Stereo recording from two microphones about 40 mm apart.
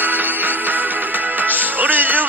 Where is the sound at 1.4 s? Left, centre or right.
Right.